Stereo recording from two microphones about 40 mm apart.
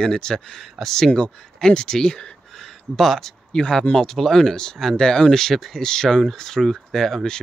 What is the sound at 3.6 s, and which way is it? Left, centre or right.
Speech, left.